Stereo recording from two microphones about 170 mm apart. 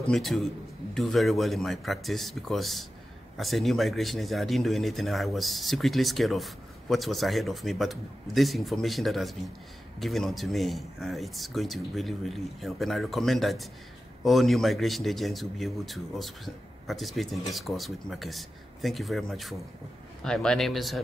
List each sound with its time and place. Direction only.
0.0 s speech: centre (ahead or behind)